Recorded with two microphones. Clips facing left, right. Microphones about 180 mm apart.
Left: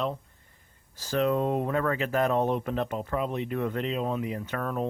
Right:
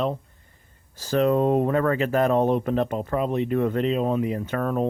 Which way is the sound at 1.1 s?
40° right (ahead or behind).